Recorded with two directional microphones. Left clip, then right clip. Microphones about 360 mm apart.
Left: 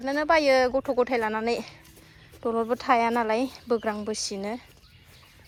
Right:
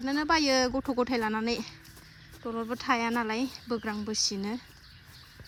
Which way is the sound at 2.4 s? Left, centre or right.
Left.